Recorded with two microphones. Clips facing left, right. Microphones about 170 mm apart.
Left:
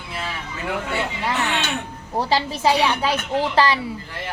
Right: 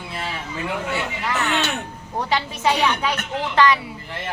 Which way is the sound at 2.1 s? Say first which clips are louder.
Left 3 dB; 35° left (ahead or behind).